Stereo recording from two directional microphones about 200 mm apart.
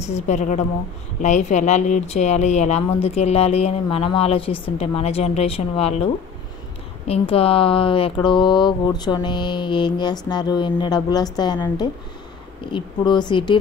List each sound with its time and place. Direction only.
0.0 s speech: 35° left (ahead or behind)
7.1 s speech: 30° left (ahead or behind)